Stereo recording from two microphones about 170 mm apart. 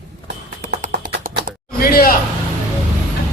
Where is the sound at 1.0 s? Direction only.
55° right (ahead or behind).